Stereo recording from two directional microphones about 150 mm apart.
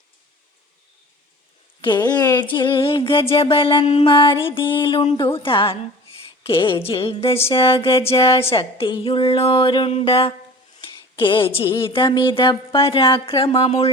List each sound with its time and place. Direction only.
1.8 s music: 30° left (ahead or behind)